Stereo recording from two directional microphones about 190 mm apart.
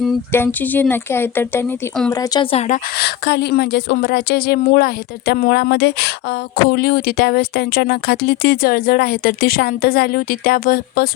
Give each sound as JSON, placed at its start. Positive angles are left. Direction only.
{"t": 0.3, "sound": "speech", "side_deg": 10}
{"t": 2.4, "sound": "speech", "side_deg": 30}
{"t": 3.0, "sound": "speech", "side_deg": 60}